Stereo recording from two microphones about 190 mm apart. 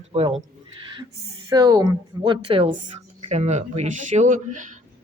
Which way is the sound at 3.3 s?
35° right (ahead or behind).